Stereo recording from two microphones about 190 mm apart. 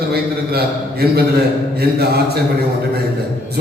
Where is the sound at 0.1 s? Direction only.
55° right (ahead or behind).